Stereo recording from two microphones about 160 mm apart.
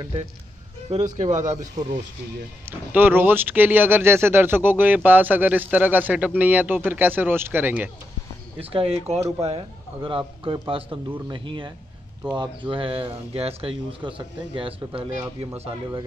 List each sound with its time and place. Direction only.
0.0 s speech: 35° right (ahead or behind)
0.8 s speech: 45° right (ahead or behind)
2.6 s speech: 15° right (ahead or behind)
8.5 s speech: 40° right (ahead or behind)